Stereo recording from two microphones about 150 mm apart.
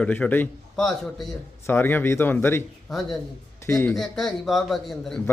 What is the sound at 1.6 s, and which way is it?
A man's voice, 15° left (ahead or behind).